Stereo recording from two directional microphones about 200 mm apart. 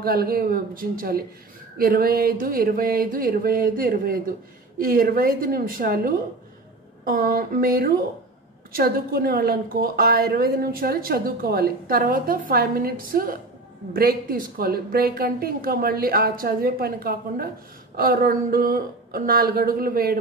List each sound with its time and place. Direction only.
0.0 s a woman's voice: 50° right (ahead or behind)